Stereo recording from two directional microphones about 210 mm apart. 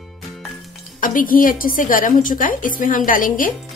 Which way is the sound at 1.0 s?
40° left (ahead or behind).